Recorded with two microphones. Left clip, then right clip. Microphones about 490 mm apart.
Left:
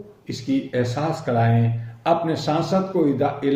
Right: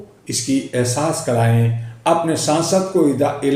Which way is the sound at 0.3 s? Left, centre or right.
Left.